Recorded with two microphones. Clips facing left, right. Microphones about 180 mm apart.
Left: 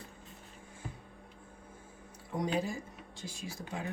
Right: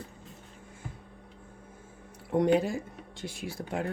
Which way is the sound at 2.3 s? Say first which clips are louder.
Right 9 dB; 65° right (ahead or behind).